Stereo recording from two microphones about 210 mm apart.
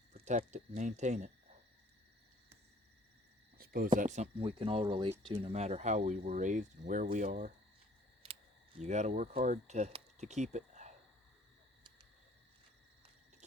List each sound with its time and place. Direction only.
0.1 s speech: 35° right (ahead or behind)
3.6 s a sound: 45° right (ahead or behind)
3.9 s speech: 35° right (ahead or behind)
8.8 s speech: 35° right (ahead or behind)